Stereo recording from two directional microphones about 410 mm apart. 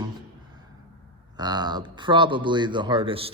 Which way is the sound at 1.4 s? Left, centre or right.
Centre.